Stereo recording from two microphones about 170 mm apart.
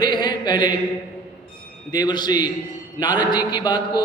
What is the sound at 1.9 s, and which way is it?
A man's voice, 25° left (ahead or behind).